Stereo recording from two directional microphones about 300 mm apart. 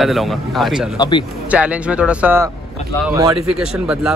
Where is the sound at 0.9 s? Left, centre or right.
Centre.